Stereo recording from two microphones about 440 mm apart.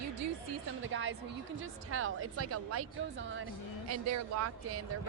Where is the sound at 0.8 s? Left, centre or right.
Right.